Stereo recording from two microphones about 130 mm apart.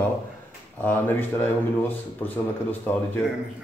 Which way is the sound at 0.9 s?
15° left (ahead or behind).